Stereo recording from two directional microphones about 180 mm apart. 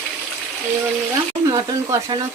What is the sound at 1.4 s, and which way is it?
Speech, 20° right (ahead or behind).